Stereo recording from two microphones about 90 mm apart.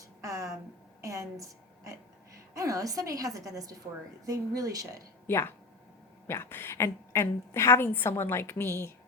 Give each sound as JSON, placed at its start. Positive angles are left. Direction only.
{"t": 0.2, "sound": "a sound", "side_deg": -35}
{"t": 1.0, "sound": "a woman's voice", "side_deg": -35}
{"t": 5.2, "sound": "a woman's voice", "side_deg": 25}